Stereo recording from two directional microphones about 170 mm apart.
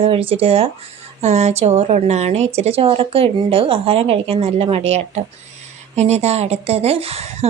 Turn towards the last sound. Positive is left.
turn(degrees=-40)  # may be behind; listen again after turning